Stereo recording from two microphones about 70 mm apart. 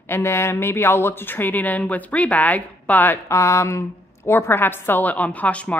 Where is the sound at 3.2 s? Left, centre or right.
Left.